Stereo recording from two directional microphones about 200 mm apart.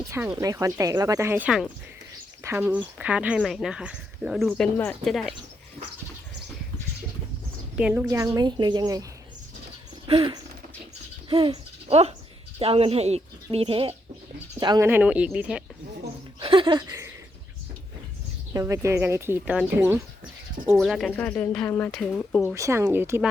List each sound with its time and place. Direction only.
0.1 s speech: 15° right (ahead or behind); by 5.3 s centre (ahead or behind)
7.8 s speech: 5° right (ahead or behind)
8.0 s speech: 15° right (ahead or behind)
10.1 s speech: 25° right (ahead or behind)
14.8 s speech: 10° right (ahead or behind)
16.4 s speech: 25° right (ahead or behind)
18.5 s a woman's voice: 15° right (ahead or behind); by 22.5 s 5° left (ahead or behind)
22.5 s speech: 15° right (ahead or behind)